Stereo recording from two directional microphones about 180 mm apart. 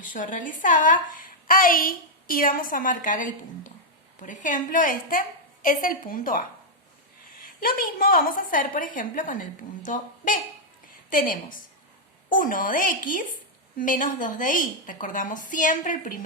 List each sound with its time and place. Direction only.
0.0 s a woman's voice: 45° left (ahead or behind)